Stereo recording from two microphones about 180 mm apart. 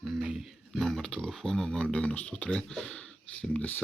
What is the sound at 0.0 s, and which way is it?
Speech, centre (ahead or behind).